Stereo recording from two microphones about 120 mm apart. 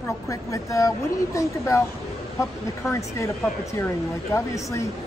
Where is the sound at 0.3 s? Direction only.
25° left (ahead or behind).